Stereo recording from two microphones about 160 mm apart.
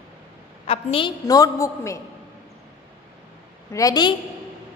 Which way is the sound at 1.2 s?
20° left (ahead or behind).